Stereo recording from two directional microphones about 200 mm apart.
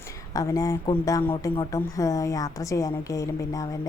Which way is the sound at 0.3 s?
15° left (ahead or behind).